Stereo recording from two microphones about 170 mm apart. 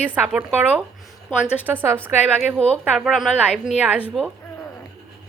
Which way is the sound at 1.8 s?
15° right (ahead or behind).